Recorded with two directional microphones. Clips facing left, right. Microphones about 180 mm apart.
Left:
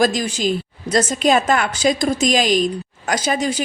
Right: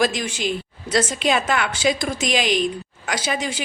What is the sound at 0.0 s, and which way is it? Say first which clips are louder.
A woman's voice: left 4 dB; 40° left (ahead or behind).